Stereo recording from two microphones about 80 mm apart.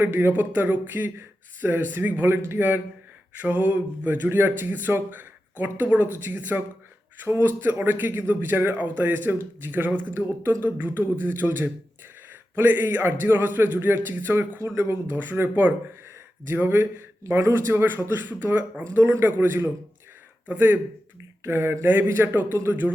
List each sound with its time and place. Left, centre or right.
0.0 s speech: right